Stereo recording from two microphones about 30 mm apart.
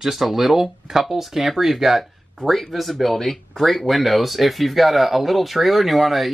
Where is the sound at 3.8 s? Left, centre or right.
Centre.